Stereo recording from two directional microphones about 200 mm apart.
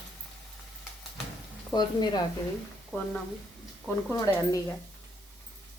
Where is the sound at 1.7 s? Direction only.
20° left (ahead or behind).